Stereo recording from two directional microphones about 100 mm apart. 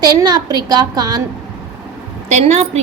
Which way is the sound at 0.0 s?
40° right (ahead or behind).